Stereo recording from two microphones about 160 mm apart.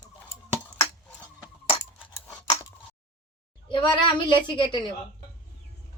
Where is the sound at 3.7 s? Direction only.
30° left (ahead or behind).